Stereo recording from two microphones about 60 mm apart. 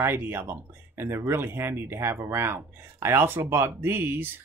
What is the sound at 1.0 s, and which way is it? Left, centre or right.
Speech, right.